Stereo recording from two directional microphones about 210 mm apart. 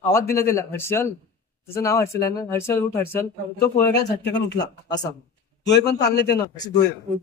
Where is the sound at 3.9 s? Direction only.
55° left (ahead or behind).